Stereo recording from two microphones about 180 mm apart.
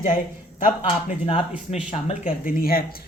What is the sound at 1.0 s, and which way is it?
A woman's voice, 35° left (ahead or behind).